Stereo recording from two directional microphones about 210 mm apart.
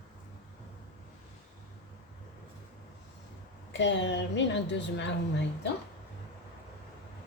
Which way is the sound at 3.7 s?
60° left (ahead or behind).